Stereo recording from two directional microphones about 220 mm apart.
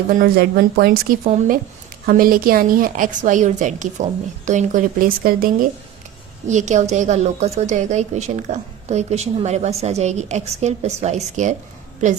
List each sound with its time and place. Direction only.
0.1 s a woman's voice: 40° right (ahead or behind)